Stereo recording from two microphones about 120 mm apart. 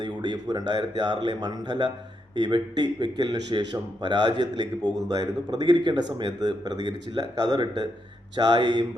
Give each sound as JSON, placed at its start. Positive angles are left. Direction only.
{"t": 0.0, "sound": "speech", "side_deg": -35}